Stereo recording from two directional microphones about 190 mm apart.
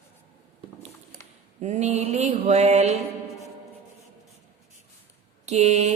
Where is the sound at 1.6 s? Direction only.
35° right (ahead or behind).